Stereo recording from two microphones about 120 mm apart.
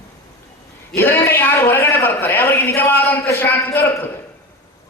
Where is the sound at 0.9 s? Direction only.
20° left (ahead or behind).